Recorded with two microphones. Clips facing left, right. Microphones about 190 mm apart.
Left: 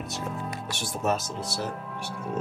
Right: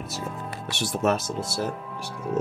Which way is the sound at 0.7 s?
75° right (ahead or behind).